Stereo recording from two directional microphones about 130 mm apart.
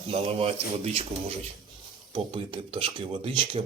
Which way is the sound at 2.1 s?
40° right (ahead or behind).